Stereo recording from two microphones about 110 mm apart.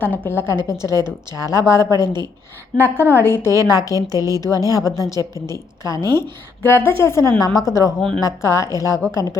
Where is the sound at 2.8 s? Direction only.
20° right (ahead or behind).